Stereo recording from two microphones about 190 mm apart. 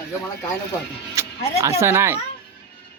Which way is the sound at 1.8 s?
15° right (ahead or behind).